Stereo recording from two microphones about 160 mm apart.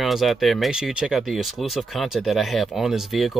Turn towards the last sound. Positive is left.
turn(degrees=0)  # may be behind; listen again after turning